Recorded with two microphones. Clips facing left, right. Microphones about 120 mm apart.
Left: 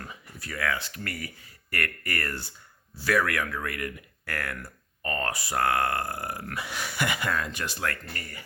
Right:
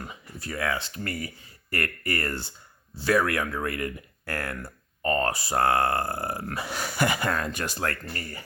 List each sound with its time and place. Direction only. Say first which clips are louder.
0.0 s speech: right 3 dB; 25° right (ahead or behind)